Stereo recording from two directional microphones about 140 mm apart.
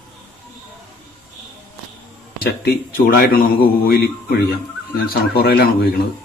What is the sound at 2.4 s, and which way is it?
A man's voice, 90° left.